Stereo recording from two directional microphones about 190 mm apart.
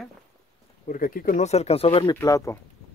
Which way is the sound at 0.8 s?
45° left (ahead or behind).